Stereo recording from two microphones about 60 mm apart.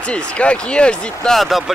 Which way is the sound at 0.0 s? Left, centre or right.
Centre.